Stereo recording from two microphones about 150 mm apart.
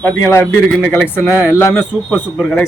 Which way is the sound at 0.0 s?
10° left (ahead or behind).